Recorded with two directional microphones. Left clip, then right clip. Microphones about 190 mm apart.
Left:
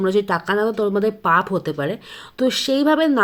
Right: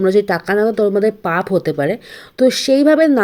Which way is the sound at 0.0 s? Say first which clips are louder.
Right 5 dB; 20° right (ahead or behind).